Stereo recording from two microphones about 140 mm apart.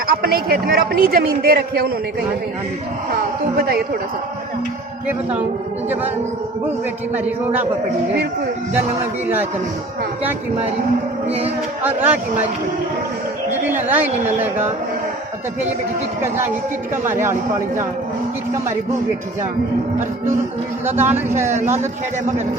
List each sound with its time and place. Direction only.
0.1 s speech: 90° right
3.1 s speech: 90° right
7.1 s speech: 10° right (ahead or behind)
11.3 s music: 45° right (ahead or behind)
11.8 s speech: 15° right (ahead or behind)
13.5 s speech: 15° right (ahead or behind)
16.9 s speech: 15° right (ahead or behind)
20.8 s speech: 15° right (ahead or behind)